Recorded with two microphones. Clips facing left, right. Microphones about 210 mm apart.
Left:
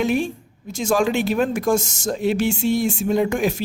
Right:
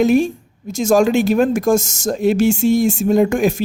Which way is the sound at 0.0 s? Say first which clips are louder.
Right 7 dB; 40° right (ahead or behind).